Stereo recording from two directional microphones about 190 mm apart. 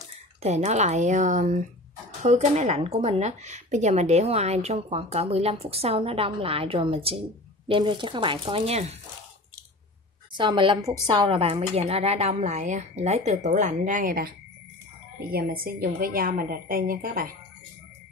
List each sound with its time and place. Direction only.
0.4 s speech: 35° right (ahead or behind)
10.3 s speech: 25° right (ahead or behind); by 14.3 s 50° right (ahead or behind)
15.3 s a woman's voice: 50° right (ahead or behind)